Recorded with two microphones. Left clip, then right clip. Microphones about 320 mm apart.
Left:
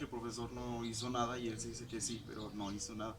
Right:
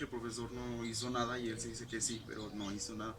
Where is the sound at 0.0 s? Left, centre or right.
Centre.